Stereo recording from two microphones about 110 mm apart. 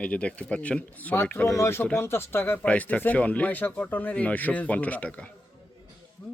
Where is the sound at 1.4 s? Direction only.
25° left (ahead or behind).